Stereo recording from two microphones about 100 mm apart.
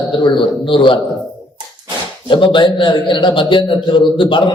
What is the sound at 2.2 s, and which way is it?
A man's voice, 55° left (ahead or behind).